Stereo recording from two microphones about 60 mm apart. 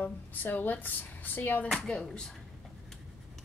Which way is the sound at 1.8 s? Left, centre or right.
Centre.